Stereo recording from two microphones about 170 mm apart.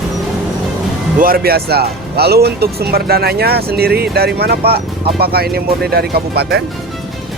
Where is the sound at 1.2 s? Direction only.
60° right (ahead or behind).